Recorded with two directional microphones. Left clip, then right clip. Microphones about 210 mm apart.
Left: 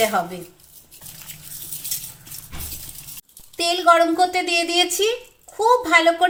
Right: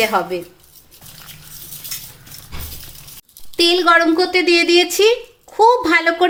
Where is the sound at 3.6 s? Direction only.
50° right (ahead or behind).